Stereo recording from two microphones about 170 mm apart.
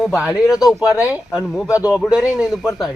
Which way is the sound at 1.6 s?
20° left (ahead or behind).